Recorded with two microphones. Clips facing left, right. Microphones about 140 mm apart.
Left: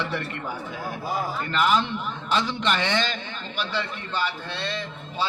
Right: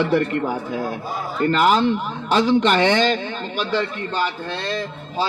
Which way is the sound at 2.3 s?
50° right (ahead or behind).